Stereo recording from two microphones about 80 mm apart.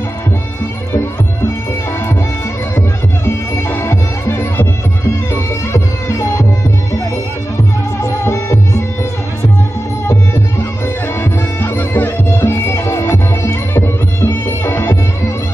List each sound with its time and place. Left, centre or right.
3.3 s music: left
8.0 s music: left
11.6 s music: left